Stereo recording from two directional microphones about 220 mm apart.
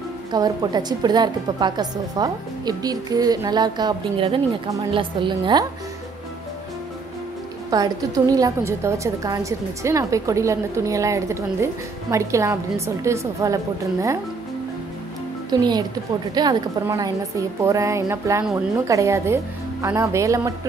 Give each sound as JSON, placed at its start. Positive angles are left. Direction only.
{"t": 0.3, "sound": "a woman's voice", "side_deg": -20}
{"t": 7.7, "sound": "a woman's voice", "side_deg": -15}
{"t": 15.5, "sound": "a woman's voice", "side_deg": -20}